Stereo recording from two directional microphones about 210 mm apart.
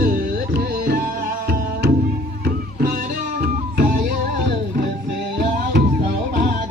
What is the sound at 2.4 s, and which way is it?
Music, 45° right (ahead or behind).